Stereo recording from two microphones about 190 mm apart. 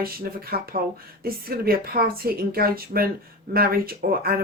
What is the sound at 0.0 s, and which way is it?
Speech, 50° right (ahead or behind).